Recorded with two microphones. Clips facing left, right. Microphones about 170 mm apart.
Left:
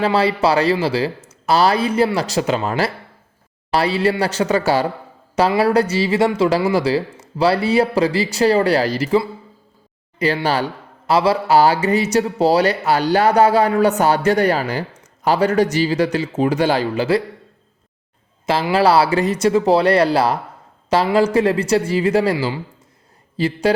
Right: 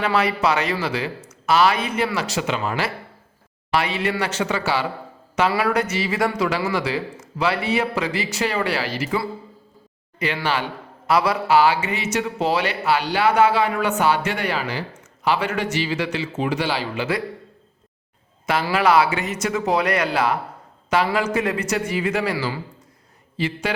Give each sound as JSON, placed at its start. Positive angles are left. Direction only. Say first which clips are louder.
{"t": 0.0, "sound": "a man's voice", "louder": "left 4 dB", "side_deg": 30}
{"t": 5.5, "sound": "a man's voice", "louder": "left 7 dB", "side_deg": 30}
{"t": 10.2, "sound": "a man's voice", "louder": "left 5 dB", "side_deg": 35}
{"t": 18.4, "sound": "a man's voice", "louder": "left 4 dB", "side_deg": 30}